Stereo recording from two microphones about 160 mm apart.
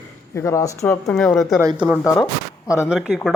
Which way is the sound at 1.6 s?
25° right (ahead or behind).